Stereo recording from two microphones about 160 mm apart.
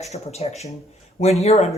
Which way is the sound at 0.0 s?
45° left (ahead or behind).